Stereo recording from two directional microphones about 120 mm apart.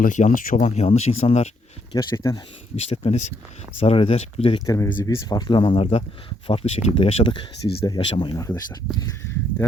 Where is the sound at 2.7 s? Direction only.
65° left (ahead or behind).